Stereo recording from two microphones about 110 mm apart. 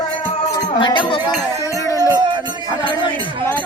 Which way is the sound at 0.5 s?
40° left (ahead or behind).